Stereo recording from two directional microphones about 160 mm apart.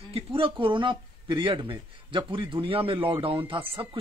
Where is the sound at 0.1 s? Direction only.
35° right (ahead or behind).